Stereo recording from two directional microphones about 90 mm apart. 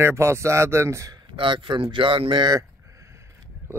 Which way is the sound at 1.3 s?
65° right (ahead or behind).